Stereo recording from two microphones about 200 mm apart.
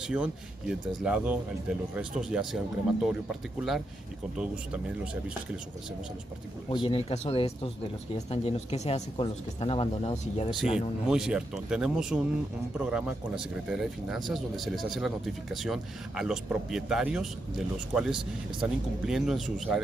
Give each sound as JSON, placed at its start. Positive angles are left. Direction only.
{"t": 0.0, "sound": "speech", "side_deg": -5}
{"t": 6.7, "sound": "speech", "side_deg": 25}
{"t": 11.1, "sound": "speech", "side_deg": -5}